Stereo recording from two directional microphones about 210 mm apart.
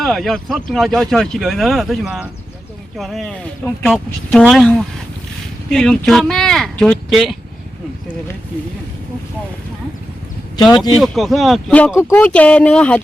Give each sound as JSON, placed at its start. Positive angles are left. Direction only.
{"t": 0.0, "sound": "speech", "side_deg": 0}
{"t": 10.6, "sound": "speech", "side_deg": 20}
{"t": 11.0, "sound": "speech", "side_deg": 0}